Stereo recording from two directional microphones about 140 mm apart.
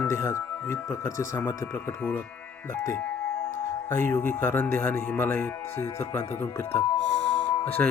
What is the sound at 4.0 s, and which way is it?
Speech, 15° left (ahead or behind).